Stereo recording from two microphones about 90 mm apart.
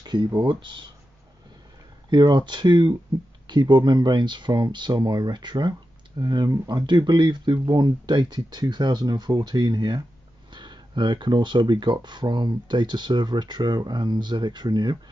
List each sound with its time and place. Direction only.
0.0 s a sound: 55° right (ahead or behind)
0.4 s speech: 60° right (ahead or behind)
2.0 s speech: 55° right (ahead or behind)
6.9 s speech: 55° right (ahead or behind)